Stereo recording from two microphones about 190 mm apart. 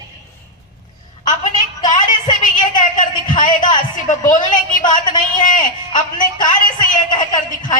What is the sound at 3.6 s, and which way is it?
A woman's voice, 45° left (ahead or behind).